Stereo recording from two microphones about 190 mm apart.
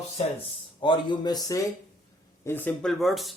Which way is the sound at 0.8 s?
25° left (ahead or behind).